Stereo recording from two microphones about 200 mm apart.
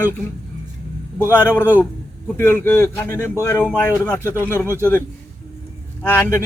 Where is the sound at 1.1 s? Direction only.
10° left (ahead or behind).